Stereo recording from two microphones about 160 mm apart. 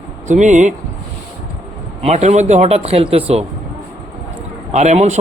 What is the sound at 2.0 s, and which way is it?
A man's voice, 45° right (ahead or behind).